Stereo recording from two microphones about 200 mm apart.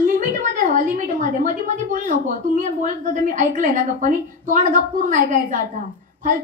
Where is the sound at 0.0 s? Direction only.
40° right (ahead or behind).